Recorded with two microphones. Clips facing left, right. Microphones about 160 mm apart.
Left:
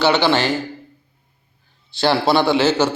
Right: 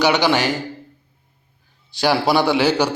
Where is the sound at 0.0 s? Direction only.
15° right (ahead or behind).